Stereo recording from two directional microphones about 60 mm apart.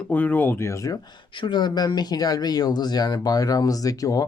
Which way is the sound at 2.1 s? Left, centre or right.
Left.